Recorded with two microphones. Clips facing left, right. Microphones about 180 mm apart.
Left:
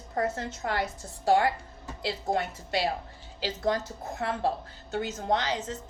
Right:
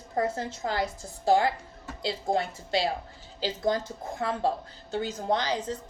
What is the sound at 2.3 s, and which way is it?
A woman's voice, 30° right (ahead or behind).